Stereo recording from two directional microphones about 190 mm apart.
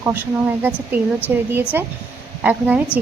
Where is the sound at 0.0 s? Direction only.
10° right (ahead or behind).